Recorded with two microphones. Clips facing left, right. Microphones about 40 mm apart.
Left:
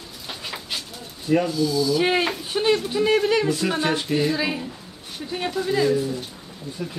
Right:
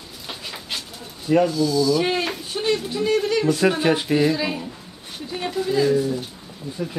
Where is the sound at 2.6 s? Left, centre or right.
Left.